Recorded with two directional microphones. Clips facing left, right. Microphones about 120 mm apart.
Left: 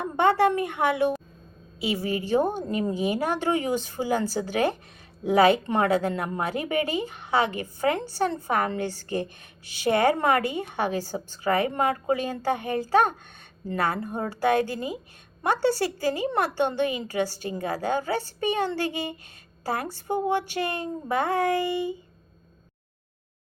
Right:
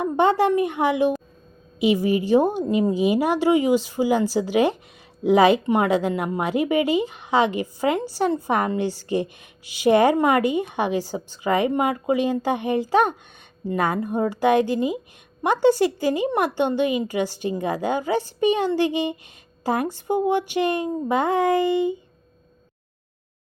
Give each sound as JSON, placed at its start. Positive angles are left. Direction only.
{"t": 0.0, "sound": "a woman's voice", "side_deg": -15}